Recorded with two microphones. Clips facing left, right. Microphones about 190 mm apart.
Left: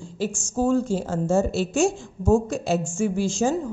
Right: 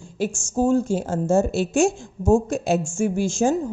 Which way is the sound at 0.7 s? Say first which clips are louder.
Even; 50° right (ahead or behind).